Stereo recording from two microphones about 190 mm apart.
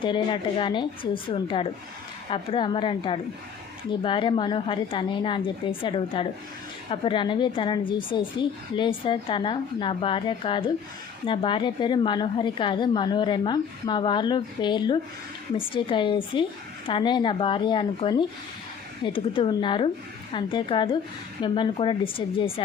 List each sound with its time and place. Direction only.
0.0 s a woman's voice: 25° left (ahead or behind)